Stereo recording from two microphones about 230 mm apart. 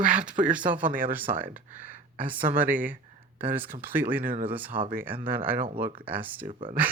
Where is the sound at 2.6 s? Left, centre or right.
Centre.